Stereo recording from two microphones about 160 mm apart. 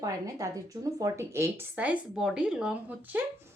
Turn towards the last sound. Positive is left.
turn(degrees=-10)  # may be behind; listen again after turning